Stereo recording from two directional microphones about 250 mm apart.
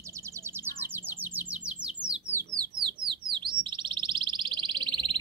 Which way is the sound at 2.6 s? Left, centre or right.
Centre.